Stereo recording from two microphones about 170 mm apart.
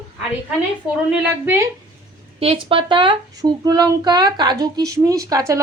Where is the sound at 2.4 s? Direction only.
35° right (ahead or behind).